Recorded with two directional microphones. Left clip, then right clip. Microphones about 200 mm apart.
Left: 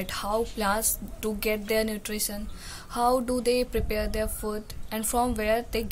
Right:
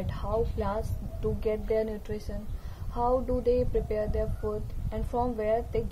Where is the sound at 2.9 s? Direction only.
20° left (ahead or behind).